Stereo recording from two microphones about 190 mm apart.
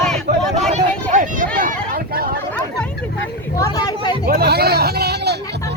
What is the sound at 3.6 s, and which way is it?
Speech, 20° left (ahead or behind).